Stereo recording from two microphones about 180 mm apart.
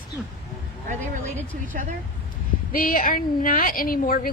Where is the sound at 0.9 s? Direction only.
40° right (ahead or behind).